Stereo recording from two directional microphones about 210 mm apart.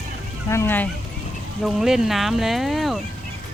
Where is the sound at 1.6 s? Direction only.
Centre (ahead or behind).